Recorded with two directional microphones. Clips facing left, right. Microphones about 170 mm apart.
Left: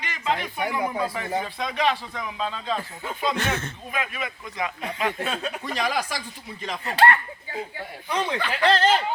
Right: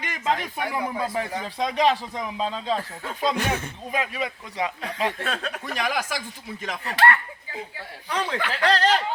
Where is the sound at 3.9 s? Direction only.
35° right (ahead or behind).